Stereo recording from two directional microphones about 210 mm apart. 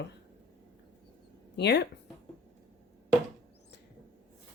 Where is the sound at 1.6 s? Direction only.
55° left (ahead or behind).